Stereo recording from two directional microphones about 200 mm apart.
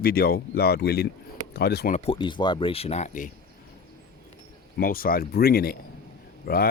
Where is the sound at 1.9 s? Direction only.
30° left (ahead or behind).